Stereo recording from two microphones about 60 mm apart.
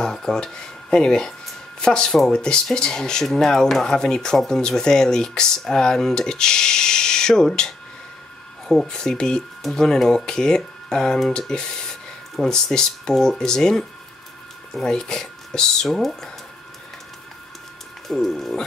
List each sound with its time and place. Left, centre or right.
0.0 s speech: centre
18.0 s speech: centre